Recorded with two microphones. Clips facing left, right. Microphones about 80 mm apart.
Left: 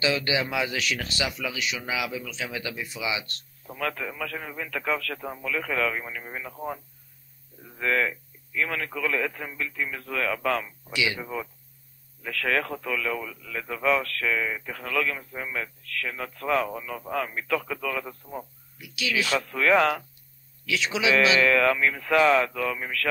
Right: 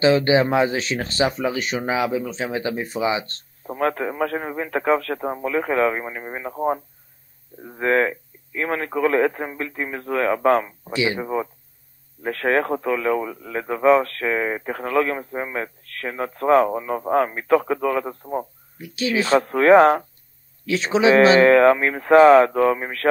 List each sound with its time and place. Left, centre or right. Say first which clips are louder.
0.0 s a man's voice: right 10 dB; right